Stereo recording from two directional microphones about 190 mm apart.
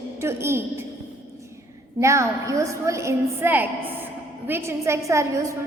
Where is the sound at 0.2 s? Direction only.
15° right (ahead or behind).